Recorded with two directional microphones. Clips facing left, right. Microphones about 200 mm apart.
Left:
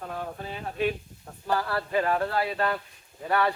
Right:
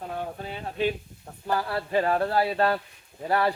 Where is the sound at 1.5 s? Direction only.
20° right (ahead or behind).